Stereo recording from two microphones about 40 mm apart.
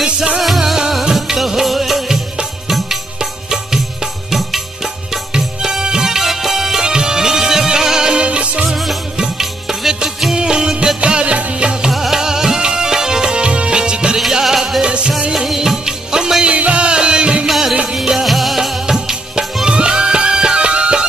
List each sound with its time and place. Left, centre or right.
1.1 s music: centre
3.2 s music: centre
4.3 s music: centre
5.3 s music: centre
8.2 s music: right
8.6 s music: centre; by 11.9 s right
11.9 s music: centre
14.4 s music: centre
14.8 s music: right
15.3 s music: centre
16.4 s music: right
17.5 s music: centre; by 21.1 s right